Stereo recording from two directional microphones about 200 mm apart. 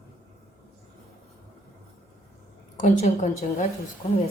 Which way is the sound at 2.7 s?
35° left (ahead or behind).